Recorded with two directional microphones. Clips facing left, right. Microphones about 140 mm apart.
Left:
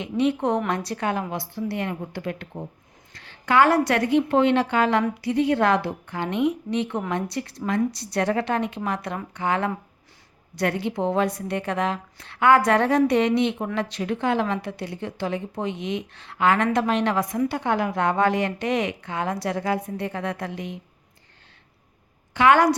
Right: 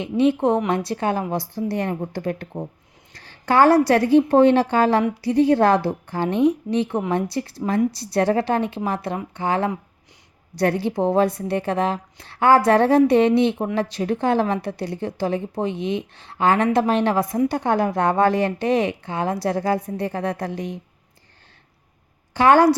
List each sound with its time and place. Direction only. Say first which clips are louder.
0.0 s speech: right 4 dB; 25° right (ahead or behind)
1.3 s a woman's voice: right 4 dB; 40° right (ahead or behind)
22.4 s a woman's voice: right 3 dB; 35° right (ahead or behind)